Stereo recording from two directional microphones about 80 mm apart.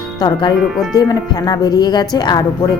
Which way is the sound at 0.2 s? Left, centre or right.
Left.